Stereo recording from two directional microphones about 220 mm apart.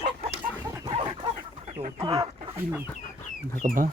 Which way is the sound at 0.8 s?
20° right (ahead or behind).